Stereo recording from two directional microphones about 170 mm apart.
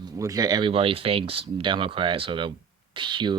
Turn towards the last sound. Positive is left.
turn(degrees=-30)  # may be behind; listen again after turning